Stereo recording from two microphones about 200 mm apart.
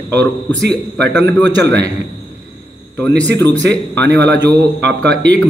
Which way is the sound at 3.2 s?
10° left (ahead or behind).